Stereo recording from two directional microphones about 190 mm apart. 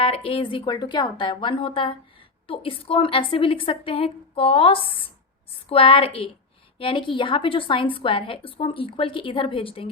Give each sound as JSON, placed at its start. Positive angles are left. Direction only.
{"t": 0.0, "sound": "a woman's voice", "side_deg": 30}